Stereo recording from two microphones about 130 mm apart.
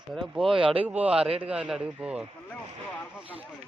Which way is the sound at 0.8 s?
10° right (ahead or behind).